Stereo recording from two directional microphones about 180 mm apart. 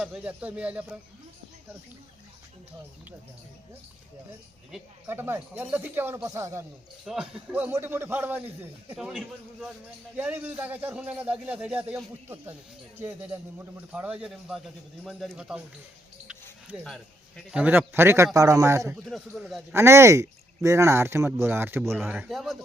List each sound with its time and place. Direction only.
0.0 s a man's voice: 5° right (ahead or behind)
4.7 s a man's voice: 10° right (ahead or behind)
7.0 s a man's voice: 5° right (ahead or behind)
19.0 s speech: centre (ahead or behind)
19.7 s a man's voice: 15° right (ahead or behind)